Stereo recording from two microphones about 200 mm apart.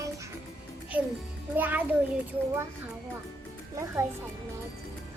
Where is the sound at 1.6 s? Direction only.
10° right (ahead or behind).